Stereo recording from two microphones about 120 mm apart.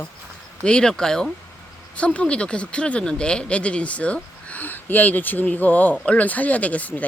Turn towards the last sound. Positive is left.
turn(degrees=15)  # may be behind; listen again after turning